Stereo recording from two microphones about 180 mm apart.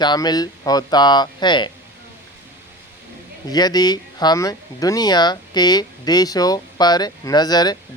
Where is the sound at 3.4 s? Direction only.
20° left (ahead or behind).